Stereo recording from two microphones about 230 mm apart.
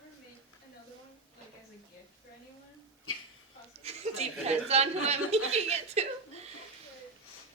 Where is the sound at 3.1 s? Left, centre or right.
Left.